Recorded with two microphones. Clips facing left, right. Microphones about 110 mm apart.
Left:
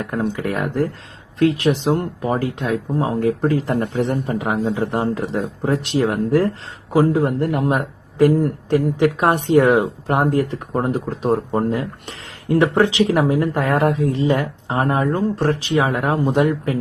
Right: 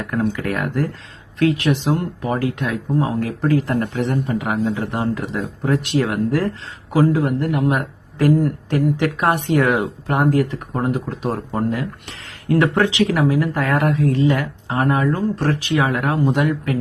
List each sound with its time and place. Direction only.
0.1 s speech: 25° left (ahead or behind)
2.0 s speech: 25° left (ahead or behind)